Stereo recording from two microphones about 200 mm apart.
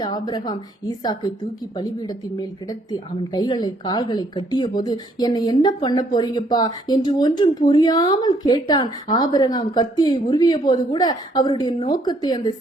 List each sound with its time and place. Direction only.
0.0 s a woman's voice: 20° left (ahead or behind)